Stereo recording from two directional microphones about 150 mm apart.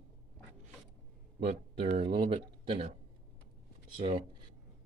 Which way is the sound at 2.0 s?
35° right (ahead or behind).